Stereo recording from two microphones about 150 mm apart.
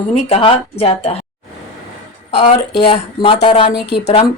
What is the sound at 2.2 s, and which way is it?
Speech, 40° left (ahead or behind).